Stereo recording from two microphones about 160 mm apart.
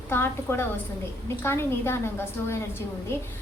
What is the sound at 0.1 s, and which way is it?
A woman's voice, 15° left (ahead or behind).